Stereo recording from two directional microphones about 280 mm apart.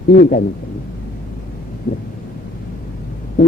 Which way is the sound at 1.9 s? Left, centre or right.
Left.